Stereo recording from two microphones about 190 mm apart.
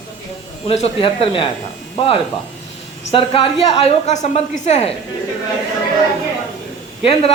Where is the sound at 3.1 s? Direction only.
30° left (ahead or behind).